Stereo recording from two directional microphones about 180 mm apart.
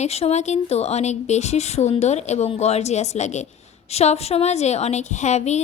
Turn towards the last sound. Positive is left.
turn(degrees=40)  # may be behind; listen again after turning